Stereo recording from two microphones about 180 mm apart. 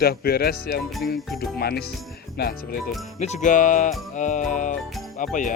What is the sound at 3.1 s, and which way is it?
Music, 40° left (ahead or behind).